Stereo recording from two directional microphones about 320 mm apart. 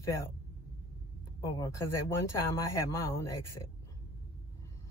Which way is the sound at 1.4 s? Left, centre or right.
Centre.